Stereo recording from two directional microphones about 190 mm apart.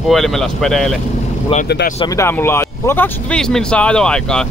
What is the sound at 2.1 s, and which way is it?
Speech, 10° left (ahead or behind).